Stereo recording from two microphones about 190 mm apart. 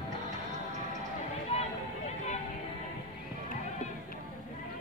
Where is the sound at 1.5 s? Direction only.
35° left (ahead or behind).